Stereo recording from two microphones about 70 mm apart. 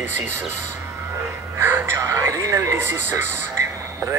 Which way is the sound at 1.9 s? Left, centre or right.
Right.